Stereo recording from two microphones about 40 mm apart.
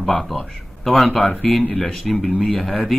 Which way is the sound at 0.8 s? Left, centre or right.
Centre.